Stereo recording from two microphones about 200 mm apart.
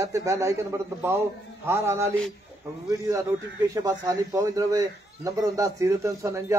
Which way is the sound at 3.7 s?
15° right (ahead or behind).